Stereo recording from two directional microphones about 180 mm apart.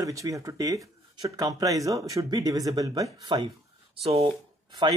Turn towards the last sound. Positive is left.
turn(degrees=-25)  # may be behind; listen again after turning